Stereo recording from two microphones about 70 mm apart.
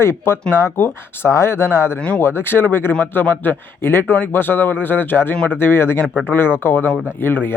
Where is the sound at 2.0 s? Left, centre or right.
Centre.